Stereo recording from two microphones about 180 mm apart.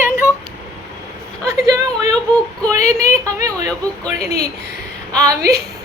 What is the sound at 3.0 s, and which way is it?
Speech, 20° right (ahead or behind).